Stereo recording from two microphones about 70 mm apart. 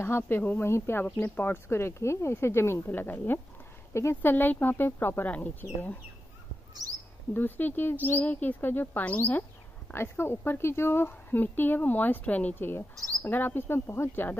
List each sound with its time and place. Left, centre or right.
0.0 s speech: left
1.7 s speech: left
3.9 s speech: left
7.3 s speech: left
9.9 s speech: left
12.5 s speech: left